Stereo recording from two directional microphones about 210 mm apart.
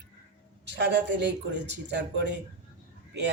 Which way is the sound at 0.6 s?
55° right (ahead or behind).